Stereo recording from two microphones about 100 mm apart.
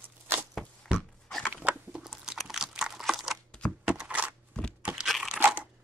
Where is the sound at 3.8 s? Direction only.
5° right (ahead or behind).